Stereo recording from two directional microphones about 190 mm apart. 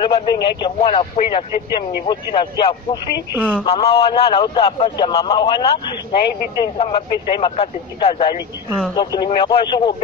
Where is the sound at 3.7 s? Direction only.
30° left (ahead or behind).